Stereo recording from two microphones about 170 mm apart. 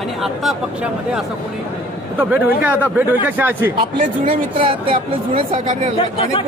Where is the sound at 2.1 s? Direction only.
10° right (ahead or behind).